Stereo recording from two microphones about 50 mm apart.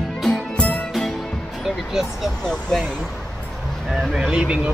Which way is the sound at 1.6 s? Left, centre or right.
Centre.